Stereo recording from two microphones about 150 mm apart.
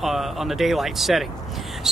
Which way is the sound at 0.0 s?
Centre (ahead or behind).